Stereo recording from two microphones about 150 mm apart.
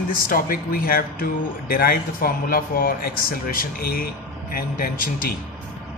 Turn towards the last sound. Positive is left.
turn(degrees=75)  # may be behind; listen again after turning